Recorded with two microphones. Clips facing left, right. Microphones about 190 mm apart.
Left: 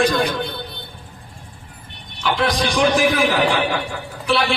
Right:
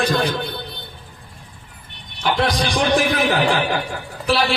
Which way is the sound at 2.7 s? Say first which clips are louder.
Left 2 dB; 35° right (ahead or behind).